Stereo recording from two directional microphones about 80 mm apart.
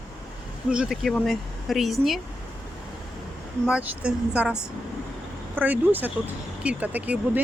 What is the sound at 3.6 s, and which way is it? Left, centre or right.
Speech, centre.